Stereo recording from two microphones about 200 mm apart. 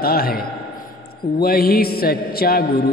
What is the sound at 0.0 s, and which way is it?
Mantra, 50° left (ahead or behind).